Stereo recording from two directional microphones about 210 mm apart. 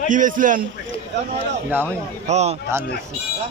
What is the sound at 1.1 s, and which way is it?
Speech, 55° right (ahead or behind).